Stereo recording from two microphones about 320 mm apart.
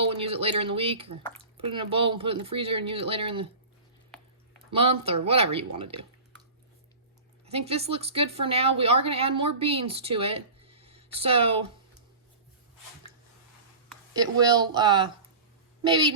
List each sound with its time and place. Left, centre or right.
0.0 s speech: centre
4.7 s speech: centre
7.4 s speech: centre
14.1 s a woman's voice: centre